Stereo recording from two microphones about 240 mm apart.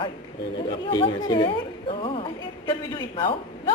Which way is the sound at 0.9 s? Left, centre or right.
Centre.